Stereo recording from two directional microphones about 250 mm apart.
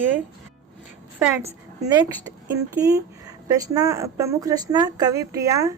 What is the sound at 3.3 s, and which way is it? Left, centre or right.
A woman's voice, centre.